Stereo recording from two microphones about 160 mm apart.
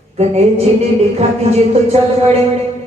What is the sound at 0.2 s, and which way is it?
Music, 40° right (ahead or behind).